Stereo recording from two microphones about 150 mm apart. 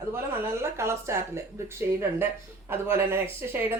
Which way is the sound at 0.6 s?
20° right (ahead or behind).